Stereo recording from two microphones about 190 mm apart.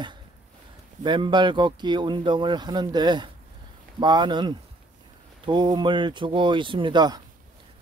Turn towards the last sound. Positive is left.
turn(degrees=-20)  # may be behind; listen again after turning